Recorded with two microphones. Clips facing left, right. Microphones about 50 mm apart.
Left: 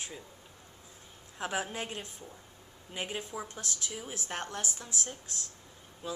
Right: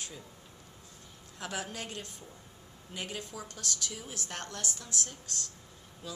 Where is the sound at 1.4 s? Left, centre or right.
Left.